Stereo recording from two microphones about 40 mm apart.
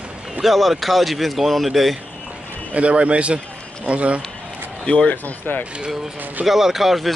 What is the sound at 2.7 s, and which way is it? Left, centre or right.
A man's voice, right.